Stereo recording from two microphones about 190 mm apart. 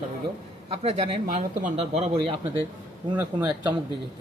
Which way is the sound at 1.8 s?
30° right (ahead or behind).